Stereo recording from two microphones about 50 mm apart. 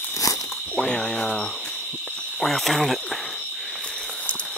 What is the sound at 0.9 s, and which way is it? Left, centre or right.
Speech, centre.